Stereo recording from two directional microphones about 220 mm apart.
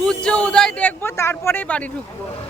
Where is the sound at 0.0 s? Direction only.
5° left (ahead or behind).